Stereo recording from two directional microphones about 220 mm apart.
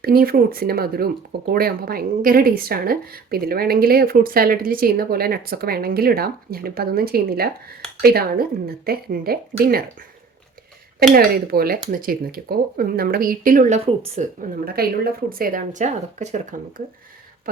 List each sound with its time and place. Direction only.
0.0 s speech: 45° right (ahead or behind)
11.1 s speech: 45° right (ahead or behind)